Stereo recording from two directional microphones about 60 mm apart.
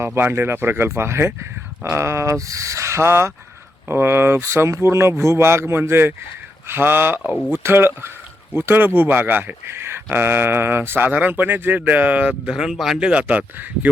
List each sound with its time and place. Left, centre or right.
0.0 s speech: right
9.6 s speech: right
12.5 s speech: centre
13.0 s speech: centre